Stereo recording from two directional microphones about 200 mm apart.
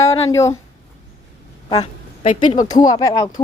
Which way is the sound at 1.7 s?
25° left (ahead or behind).